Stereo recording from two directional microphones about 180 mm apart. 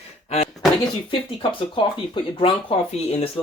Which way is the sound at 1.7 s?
25° left (ahead or behind).